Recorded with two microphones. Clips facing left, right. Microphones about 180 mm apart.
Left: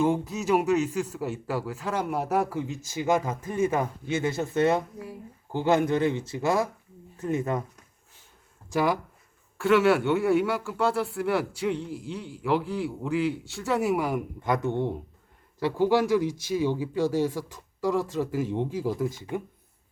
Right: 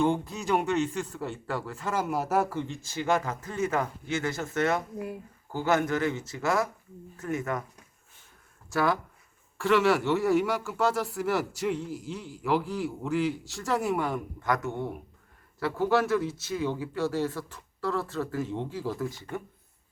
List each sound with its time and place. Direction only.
0.0 s a man's voice: 5° left (ahead or behind); by 7.6 s 20° left (ahead or behind)
8.7 s speech: 15° left (ahead or behind)
9.6 s a man's voice: centre (ahead or behind)
14.4 s speech: 20° left (ahead or behind)